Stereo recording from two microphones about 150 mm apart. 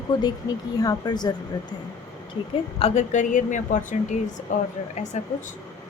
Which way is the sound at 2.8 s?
45° left (ahead or behind).